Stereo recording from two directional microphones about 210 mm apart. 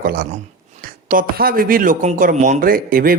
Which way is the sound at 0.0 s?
45° right (ahead or behind).